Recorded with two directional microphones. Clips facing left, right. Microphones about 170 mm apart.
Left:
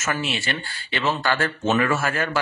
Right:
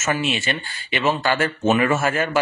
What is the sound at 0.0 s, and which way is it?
Speech, 20° right (ahead or behind).